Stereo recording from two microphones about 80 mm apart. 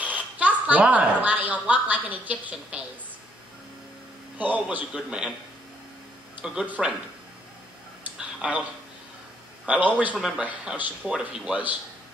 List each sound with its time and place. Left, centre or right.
0.0 s a woman's voice: centre
4.4 s a man's voice: centre
6.4 s a man's voice: centre
8.2 s a sound: centre
9.7 s a man's voice: centre
10.1 s a man's voice: centre